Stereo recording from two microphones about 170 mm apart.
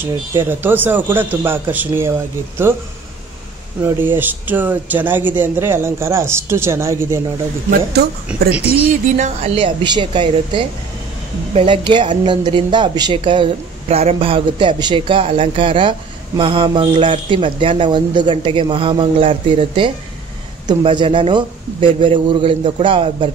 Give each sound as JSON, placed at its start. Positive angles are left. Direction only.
{"t": 0.0, "sound": "speech", "side_deg": -10}
{"t": 3.8, "sound": "speech", "side_deg": -10}
{"t": 8.3, "sound": "speech", "side_deg": -10}
{"t": 9.1, "sound": "a man's voice", "side_deg": -45}